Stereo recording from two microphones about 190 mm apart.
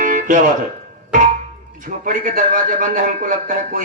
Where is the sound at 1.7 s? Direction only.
45° right (ahead or behind).